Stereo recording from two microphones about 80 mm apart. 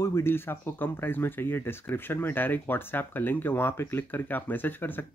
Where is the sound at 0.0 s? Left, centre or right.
Left.